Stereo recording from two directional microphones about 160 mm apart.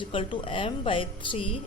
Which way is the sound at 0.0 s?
30° left (ahead or behind).